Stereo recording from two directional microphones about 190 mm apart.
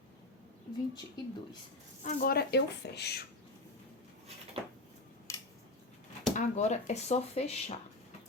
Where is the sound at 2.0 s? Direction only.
50° left (ahead or behind).